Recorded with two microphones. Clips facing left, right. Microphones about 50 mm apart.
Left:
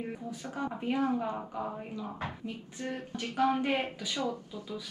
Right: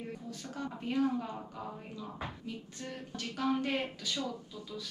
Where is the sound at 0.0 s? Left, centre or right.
Centre.